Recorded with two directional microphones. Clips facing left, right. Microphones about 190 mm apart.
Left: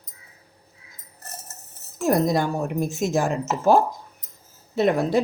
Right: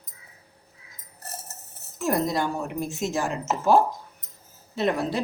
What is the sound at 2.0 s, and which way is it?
Speech, 45° left (ahead or behind).